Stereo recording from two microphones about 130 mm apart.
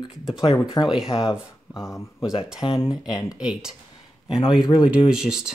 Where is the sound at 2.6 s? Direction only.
45° left (ahead or behind).